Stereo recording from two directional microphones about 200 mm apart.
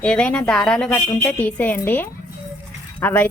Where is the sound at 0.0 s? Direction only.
5° left (ahead or behind).